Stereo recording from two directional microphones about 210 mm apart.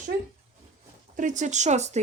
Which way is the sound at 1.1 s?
35° right (ahead or behind).